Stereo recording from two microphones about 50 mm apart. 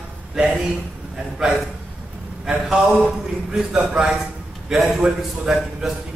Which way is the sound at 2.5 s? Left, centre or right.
Centre.